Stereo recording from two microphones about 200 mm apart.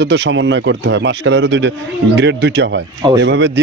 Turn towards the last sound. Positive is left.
turn(degrees=-60)  # may be behind; listen again after turning